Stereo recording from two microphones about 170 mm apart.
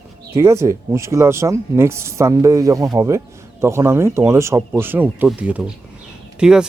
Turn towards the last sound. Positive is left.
turn(degrees=-5)  # may be behind; listen again after turning